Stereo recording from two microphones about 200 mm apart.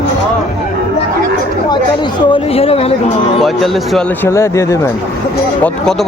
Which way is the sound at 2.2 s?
25° left (ahead or behind).